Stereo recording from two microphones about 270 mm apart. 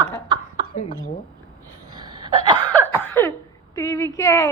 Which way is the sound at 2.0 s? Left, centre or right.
Centre.